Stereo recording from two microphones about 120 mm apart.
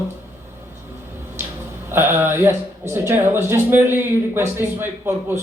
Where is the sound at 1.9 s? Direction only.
20° right (ahead or behind).